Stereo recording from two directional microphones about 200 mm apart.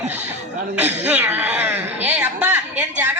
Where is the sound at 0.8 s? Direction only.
10° right (ahead or behind).